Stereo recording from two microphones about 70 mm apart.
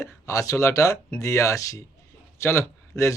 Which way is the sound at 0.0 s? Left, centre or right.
Left.